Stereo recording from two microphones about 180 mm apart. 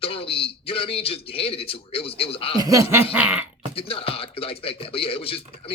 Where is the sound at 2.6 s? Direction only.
20° right (ahead or behind).